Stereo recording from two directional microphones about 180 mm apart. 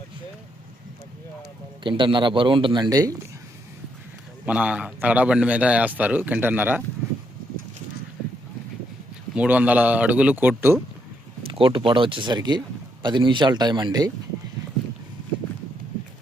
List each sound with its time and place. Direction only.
1.8 s speech: 25° right (ahead or behind)
4.4 s a man's voice: 5° right (ahead or behind)
9.3 s a man's voice: 5° right (ahead or behind)
11.4 s speech: 30° right (ahead or behind)